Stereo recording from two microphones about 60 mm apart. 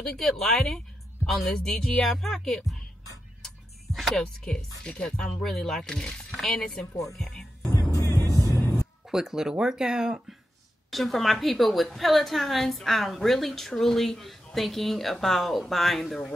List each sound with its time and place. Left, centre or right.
0.1 s a woman's voice: centre
8.4 s music: right
9.0 s speech: centre
10.9 s a woman's voice: centre